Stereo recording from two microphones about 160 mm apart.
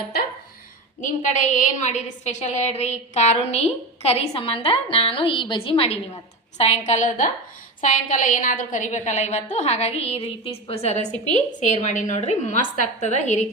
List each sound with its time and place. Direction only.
1.0 s a woman's voice: 50° left (ahead or behind)